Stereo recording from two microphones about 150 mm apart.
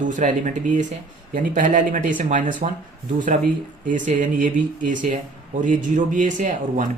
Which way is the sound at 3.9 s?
60° right (ahead or behind).